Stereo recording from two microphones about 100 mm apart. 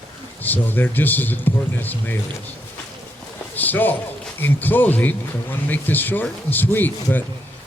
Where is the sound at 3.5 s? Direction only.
20° left (ahead or behind).